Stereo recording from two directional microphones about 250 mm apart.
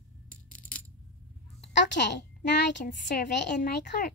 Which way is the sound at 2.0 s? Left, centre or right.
Left.